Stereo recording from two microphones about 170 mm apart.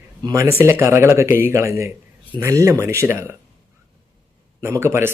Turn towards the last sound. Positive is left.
turn(degrees=-15)  # may be behind; listen again after turning